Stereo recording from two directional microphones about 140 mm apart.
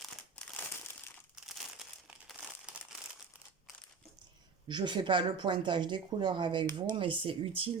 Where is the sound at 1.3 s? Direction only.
5° right (ahead or behind).